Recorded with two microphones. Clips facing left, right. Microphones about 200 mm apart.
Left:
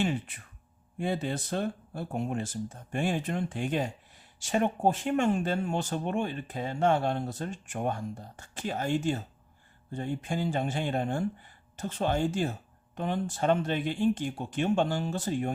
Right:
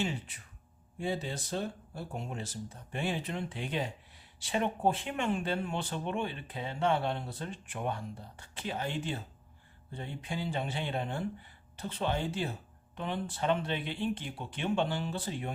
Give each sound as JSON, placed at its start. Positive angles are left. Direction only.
{"t": 0.0, "sound": "speech", "side_deg": 55}